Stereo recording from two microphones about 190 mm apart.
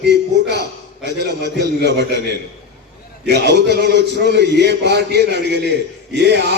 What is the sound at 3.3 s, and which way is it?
A man's voice, 60° right (ahead or behind).